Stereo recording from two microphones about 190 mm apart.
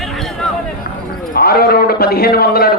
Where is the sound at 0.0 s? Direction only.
Centre (ahead or behind).